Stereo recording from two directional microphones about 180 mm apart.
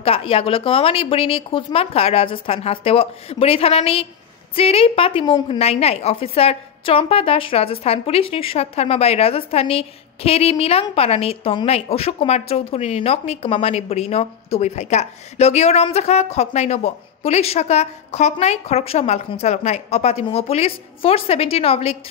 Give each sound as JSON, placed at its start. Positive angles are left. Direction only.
{"t": 0.0, "sound": "a woman's voice", "side_deg": 30}